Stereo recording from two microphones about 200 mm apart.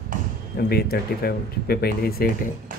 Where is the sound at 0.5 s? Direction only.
50° left (ahead or behind).